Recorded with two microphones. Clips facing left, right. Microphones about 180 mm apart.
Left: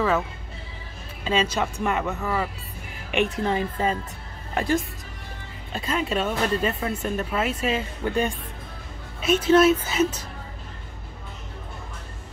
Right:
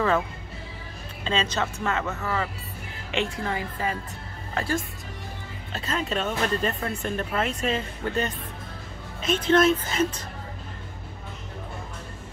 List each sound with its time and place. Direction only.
1.2 s a woman's voice: 10° left (ahead or behind)